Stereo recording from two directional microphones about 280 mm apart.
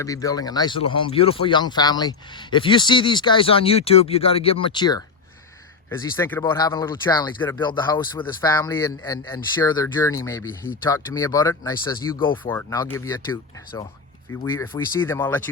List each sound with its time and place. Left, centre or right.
0.0 s speech: centre